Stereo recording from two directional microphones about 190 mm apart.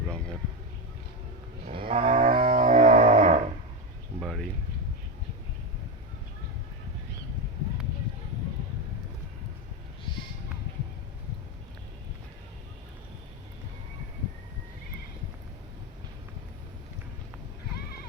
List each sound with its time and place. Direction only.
1.7 s cattle: 30° right (ahead or behind)
2.3 s music: 30° right (ahead or behind)
4.2 s a sound: centre (ahead or behind)